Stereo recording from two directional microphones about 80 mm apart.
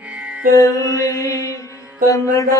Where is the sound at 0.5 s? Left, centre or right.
Left.